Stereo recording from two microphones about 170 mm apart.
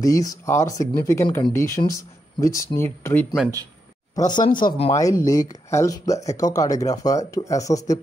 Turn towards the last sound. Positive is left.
turn(degrees=20)  # may be behind; listen again after turning